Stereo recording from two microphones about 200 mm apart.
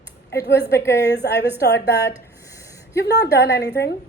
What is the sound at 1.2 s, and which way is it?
Speech, 50° left (ahead or behind).